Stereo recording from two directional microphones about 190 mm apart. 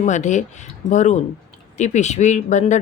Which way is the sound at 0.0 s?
40° left (ahead or behind).